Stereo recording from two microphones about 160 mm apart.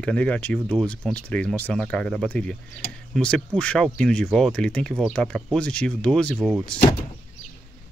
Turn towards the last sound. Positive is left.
turn(degrees=5)  # may be behind; listen again after turning